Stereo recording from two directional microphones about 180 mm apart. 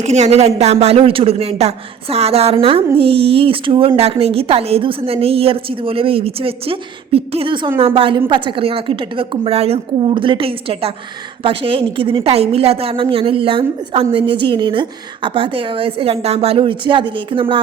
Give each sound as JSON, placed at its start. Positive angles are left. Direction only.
{"t": 0.0, "sound": "a woman's voice", "side_deg": -35}